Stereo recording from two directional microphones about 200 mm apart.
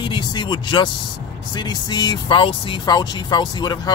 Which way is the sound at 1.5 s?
20° left (ahead or behind).